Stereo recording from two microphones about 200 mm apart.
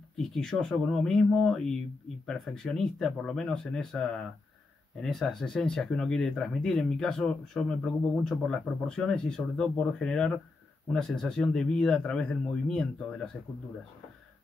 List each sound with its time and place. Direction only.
0.2 s speech: 5° left (ahead or behind)